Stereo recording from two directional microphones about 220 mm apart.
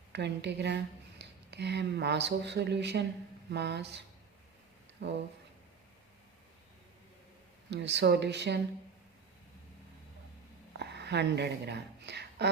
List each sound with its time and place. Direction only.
0.1 s speech: 50° right (ahead or behind)
5.0 s speech: 50° right (ahead or behind)
7.7 s speech: 50° right (ahead or behind)
10.8 s a sound: 50° right (ahead or behind)